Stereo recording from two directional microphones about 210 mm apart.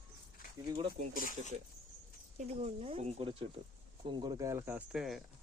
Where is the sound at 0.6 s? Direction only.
20° right (ahead or behind).